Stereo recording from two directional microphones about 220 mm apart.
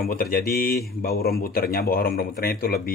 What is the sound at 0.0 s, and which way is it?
Speech, 40° left (ahead or behind).